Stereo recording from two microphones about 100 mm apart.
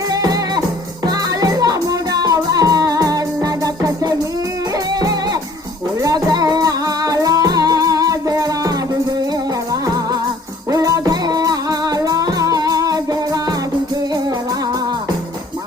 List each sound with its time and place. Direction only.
0.1 s music: 40° right (ahead or behind)
10.7 s music: 35° right (ahead or behind)